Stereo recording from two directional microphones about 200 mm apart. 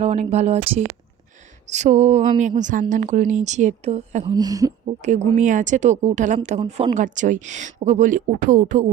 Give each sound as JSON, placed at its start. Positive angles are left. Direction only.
{"t": 0.0, "sound": "speech", "side_deg": -35}
{"t": 1.7, "sound": "speech", "side_deg": -35}
{"t": 5.0, "sound": "speech", "side_deg": -35}